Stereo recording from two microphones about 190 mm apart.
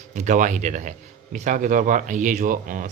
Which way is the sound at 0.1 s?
40° right (ahead or behind).